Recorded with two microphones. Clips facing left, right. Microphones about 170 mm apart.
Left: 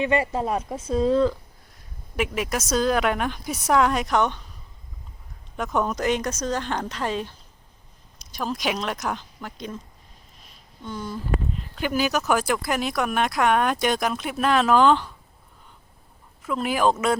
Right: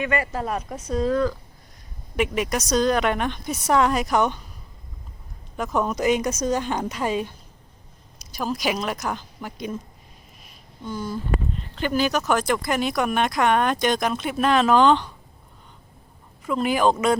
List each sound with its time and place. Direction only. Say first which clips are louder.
0.0 s speech: left 2 dB; 25° left (ahead or behind)
2.1 s speech: right 2 dB; centre (ahead or behind)
5.5 s speech: right 1 dB; centre (ahead or behind)
10.8 s speech: right 2 dB; 5° right (ahead or behind)
16.4 s speech: right 2 dB; centre (ahead or behind)